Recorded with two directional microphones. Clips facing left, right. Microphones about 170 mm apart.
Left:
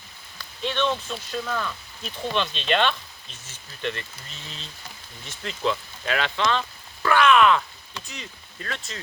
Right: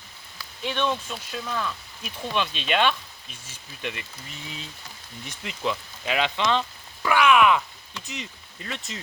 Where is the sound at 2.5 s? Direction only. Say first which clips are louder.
Right 1 dB; 5° right (ahead or behind).